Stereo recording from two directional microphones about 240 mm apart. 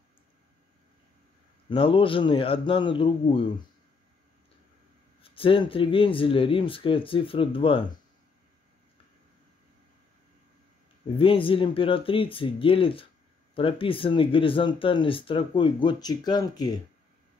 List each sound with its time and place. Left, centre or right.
1.7 s speech: left
5.2 s speech: left
11.1 s speech: left